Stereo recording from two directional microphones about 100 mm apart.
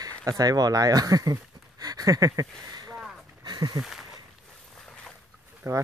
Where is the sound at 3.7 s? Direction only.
5° right (ahead or behind).